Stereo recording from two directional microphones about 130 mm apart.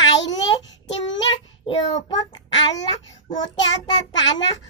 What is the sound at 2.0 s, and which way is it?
Child singing, 35° left (ahead or behind).